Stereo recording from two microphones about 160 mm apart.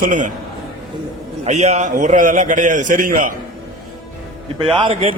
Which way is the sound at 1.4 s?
45° right (ahead or behind).